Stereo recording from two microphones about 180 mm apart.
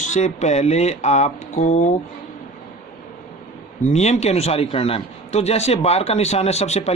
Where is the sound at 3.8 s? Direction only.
40° left (ahead or behind).